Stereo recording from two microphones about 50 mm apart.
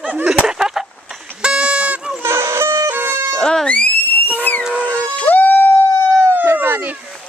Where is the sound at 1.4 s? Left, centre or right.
Centre.